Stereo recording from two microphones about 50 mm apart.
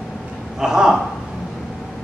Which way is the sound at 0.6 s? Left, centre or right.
Centre.